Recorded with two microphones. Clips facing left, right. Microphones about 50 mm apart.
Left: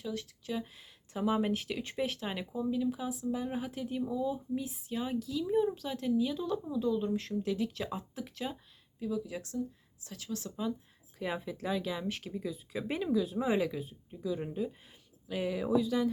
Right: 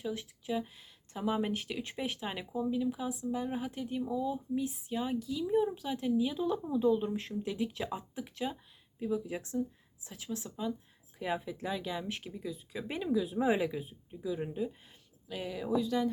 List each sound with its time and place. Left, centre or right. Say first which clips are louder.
0.0 s speech: right 1 dB; centre
6.7 s speech: right 3 dB; right; by 8.5 s centre
9.0 s speech: right 1 dB; right
11.2 s speech: right 1 dB; centre
13.1 s speech: right 2 dB; centre
15.3 s speech: left 3 dB; centre